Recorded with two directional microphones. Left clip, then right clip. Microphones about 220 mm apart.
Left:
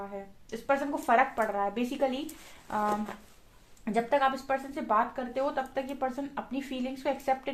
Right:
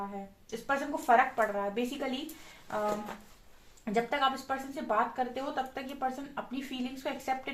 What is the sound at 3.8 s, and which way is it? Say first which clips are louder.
Speech: left 3 dB; 40° left (ahead or behind).